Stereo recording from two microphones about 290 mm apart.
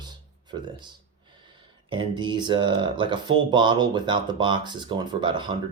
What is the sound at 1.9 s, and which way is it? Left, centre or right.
Speech, centre.